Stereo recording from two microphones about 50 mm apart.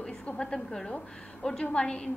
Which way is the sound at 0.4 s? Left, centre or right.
Centre.